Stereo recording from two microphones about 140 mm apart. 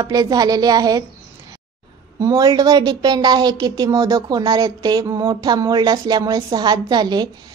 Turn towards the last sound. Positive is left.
turn(degrees=-30)  # may be behind; listen again after turning